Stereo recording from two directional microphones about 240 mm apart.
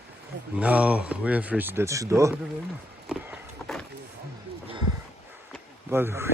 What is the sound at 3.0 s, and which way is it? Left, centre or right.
Run, centre.